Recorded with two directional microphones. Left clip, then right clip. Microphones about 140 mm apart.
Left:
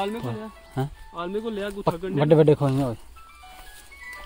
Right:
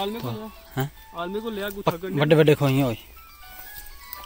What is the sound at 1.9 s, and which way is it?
Speech, 35° left (ahead or behind).